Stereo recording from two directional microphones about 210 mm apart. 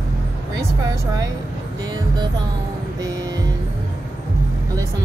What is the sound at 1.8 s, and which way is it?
Music, 20° right (ahead or behind).